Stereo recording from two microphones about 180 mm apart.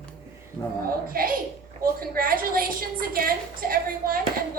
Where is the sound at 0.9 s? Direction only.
55° right (ahead or behind).